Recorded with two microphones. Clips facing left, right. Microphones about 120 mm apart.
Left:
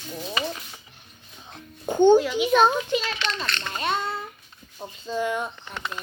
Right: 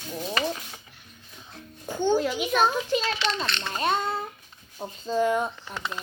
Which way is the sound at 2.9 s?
40° right (ahead or behind).